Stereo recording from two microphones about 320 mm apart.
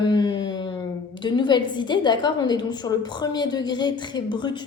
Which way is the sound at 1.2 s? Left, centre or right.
Centre.